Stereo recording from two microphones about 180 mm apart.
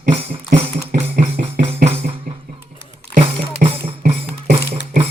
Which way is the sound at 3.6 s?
35° right (ahead or behind).